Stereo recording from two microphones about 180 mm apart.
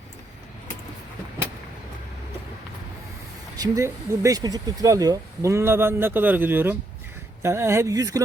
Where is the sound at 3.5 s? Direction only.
20° right (ahead or behind).